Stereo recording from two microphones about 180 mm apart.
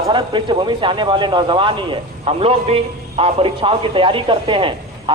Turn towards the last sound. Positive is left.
turn(degrees=-30)  # may be behind; listen again after turning